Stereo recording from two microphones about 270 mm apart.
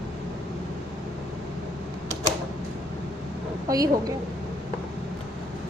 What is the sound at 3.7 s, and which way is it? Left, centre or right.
Speech, centre.